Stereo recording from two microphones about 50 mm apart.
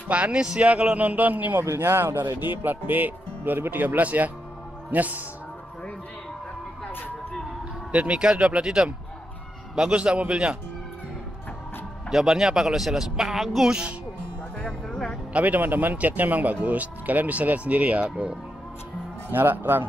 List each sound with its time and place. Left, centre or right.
0.1 s a man's voice: right
1.7 s speech: right
7.9 s a man's voice: right
9.9 s a man's voice: right
12.1 s speech: centre
14.6 s speech: centre
15.3 s speech: right
19.3 s speech: right